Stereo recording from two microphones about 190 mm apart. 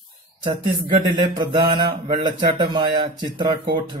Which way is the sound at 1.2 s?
25° right (ahead or behind).